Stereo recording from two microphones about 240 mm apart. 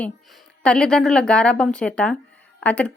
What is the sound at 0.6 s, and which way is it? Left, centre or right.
A woman's voice, centre.